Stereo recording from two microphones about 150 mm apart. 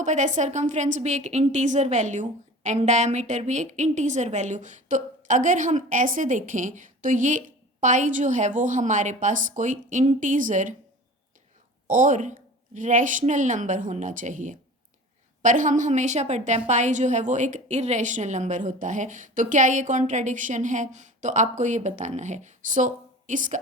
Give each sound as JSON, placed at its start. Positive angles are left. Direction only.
{"t": 0.0, "sound": "a woman's voice", "side_deg": -55}
{"t": 11.9, "sound": "a woman's voice", "side_deg": -60}